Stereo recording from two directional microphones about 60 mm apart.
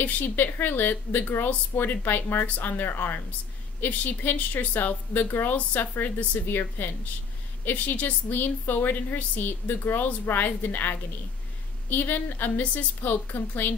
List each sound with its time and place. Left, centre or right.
0.0 s a woman's voice: left